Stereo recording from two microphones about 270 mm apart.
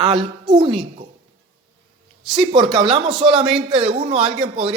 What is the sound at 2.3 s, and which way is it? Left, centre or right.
Speech, centre.